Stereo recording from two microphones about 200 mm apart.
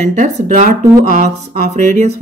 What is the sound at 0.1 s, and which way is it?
Speech, 40° right (ahead or behind).